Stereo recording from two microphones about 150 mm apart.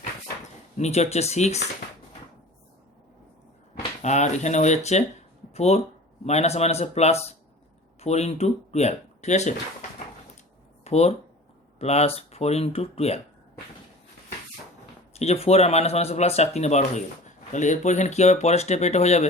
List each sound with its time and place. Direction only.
0.8 s speech: 45° left (ahead or behind)
4.0 s speech: 50° left (ahead or behind)
10.8 s speech: 45° left (ahead or behind)
15.1 s speech: 45° left (ahead or behind)